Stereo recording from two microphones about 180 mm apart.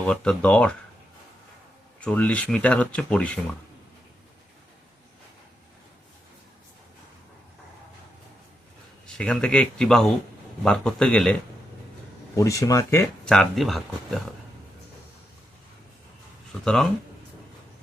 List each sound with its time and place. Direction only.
0.1 s speech: 5° left (ahead or behind)
2.0 s speech: 5° left (ahead or behind)
9.0 s speech: 5° left (ahead or behind)
12.4 s speech: 20° left (ahead or behind)
13.2 s speech: 5° left (ahead or behind)
16.6 s speech: centre (ahead or behind)